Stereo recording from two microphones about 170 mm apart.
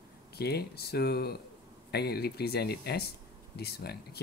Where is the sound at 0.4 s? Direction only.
70° left (ahead or behind).